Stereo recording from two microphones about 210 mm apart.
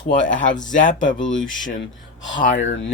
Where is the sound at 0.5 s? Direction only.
40° left (ahead or behind).